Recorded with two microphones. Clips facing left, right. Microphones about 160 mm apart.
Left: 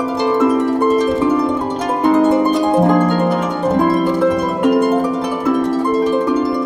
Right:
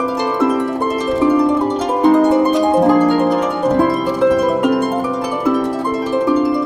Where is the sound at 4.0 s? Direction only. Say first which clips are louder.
Right 1 dB; 10° right (ahead or behind).